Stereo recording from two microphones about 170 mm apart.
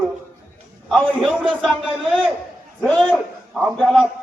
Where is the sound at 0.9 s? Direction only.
Centre (ahead or behind).